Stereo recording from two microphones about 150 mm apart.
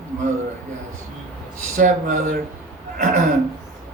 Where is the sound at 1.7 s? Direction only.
60° right (ahead or behind).